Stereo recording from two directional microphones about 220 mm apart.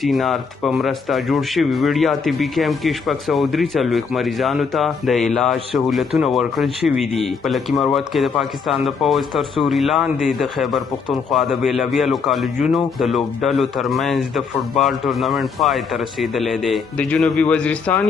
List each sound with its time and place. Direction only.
0.0 s speech: centre (ahead or behind)